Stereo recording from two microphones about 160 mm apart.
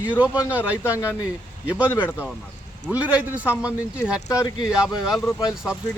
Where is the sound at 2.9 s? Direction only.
10° right (ahead or behind).